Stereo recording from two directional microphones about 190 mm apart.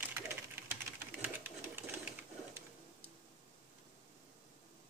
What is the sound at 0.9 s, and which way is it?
Sewing machine, 10° right (ahead or behind).